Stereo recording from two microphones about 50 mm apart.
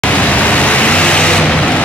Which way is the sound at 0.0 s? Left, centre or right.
Left.